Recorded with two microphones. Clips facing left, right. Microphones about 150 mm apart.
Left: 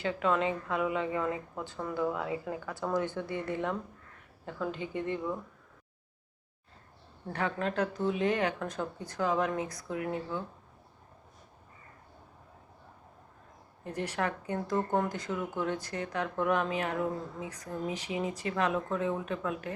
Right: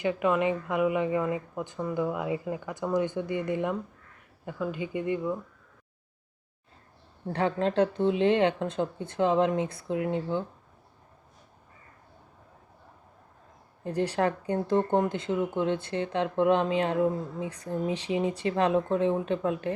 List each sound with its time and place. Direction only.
0.0 s speech: 15° right (ahead or behind)
7.3 s speech: 30° right (ahead or behind)
13.8 s speech: 30° right (ahead or behind)